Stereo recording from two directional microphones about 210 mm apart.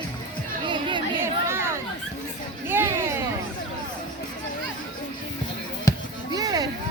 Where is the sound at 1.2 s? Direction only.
10° right (ahead or behind).